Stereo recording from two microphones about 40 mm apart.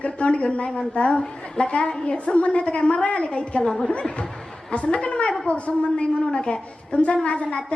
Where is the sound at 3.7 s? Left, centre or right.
Centre.